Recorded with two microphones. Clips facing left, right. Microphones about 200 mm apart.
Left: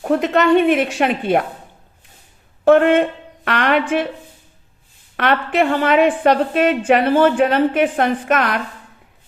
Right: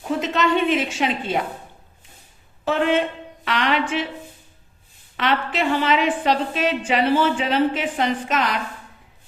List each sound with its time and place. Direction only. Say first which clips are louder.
0.0 s a woman's voice: left 6 dB; 60° left (ahead or behind)
2.6 s a woman's voice: left 8 dB; 55° left (ahead or behind)
5.1 s a woman's voice: left 5 dB; 55° left (ahead or behind)